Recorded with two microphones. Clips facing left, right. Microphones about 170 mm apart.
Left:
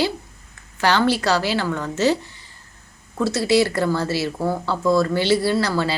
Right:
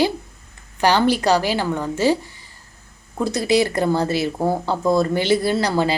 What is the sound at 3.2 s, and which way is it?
A woman's voice, 15° right (ahead or behind).